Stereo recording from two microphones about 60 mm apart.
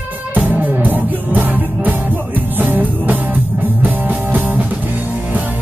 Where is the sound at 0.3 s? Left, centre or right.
Right.